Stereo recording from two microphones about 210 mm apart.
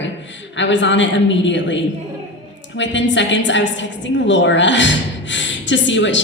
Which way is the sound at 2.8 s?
60° left (ahead or behind).